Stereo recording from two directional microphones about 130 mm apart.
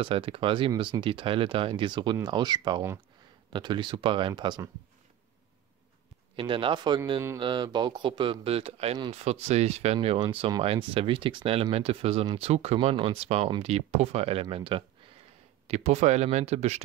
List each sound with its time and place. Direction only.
0.0 s a man's voice: 45° right (ahead or behind)
6.3 s a man's voice: 40° right (ahead or behind)
9.9 s speech: 45° right (ahead or behind)
15.6 s speech: 55° right (ahead or behind)